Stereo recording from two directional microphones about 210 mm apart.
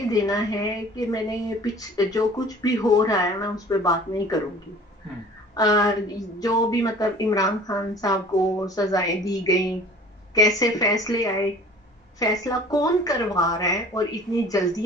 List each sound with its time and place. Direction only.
0.1 s a woman's voice: 15° left (ahead or behind)
5.6 s a woman's voice: 15° left (ahead or behind)